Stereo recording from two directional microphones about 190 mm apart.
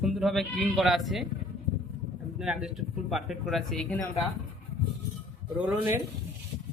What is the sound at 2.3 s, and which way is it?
Speech, 5° right (ahead or behind).